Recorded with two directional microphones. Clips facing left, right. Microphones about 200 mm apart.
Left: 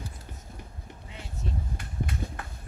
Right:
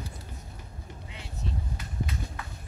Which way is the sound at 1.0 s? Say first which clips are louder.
Left 1 dB; 50° left (ahead or behind).